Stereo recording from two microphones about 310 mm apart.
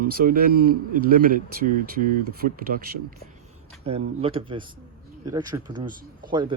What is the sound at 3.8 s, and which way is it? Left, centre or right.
Speech, centre.